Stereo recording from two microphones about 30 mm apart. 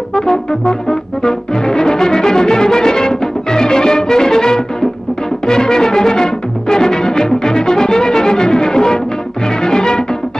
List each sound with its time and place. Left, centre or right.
0.1 s brass instrument: left
5.5 s music: left